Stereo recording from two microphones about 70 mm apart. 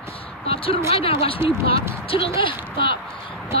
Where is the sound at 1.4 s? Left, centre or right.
Right.